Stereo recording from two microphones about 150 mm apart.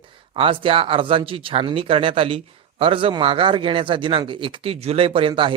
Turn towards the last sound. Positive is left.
turn(degrees=-35)  # may be behind; listen again after turning